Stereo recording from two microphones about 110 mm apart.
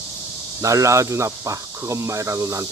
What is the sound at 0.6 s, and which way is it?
Speech, 30° right (ahead or behind).